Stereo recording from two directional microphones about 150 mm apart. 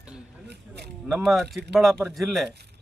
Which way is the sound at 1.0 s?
Centre (ahead or behind).